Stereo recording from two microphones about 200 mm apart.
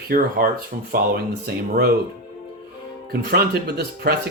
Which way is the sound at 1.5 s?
50° right (ahead or behind).